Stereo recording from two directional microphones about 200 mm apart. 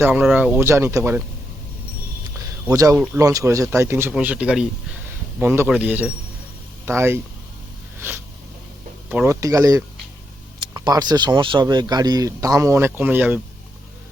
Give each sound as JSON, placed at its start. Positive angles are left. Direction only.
{"t": 0.0, "sound": "speech", "side_deg": -5}
{"t": 2.6, "sound": "a man's voice", "side_deg": -15}